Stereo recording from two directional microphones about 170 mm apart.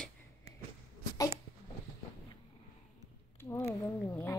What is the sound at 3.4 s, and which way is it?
Speech, 15° left (ahead or behind).